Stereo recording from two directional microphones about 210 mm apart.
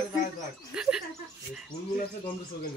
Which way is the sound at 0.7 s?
5° right (ahead or behind).